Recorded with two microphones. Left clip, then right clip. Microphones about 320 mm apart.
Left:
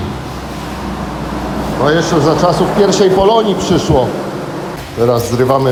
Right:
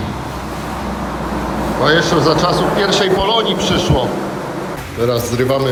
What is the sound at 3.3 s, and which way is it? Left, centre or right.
Speech, centre.